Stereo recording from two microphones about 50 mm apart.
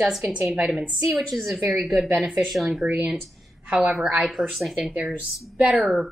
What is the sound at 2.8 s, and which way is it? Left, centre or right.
A woman's voice, right.